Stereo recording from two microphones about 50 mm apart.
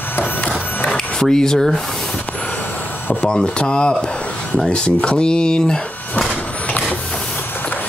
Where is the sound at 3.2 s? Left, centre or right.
Left.